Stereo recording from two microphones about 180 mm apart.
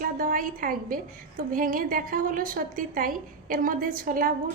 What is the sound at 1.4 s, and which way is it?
A woman's voice, 50° right (ahead or behind).